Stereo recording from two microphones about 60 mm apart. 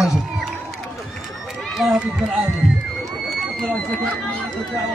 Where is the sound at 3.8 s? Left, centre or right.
Left.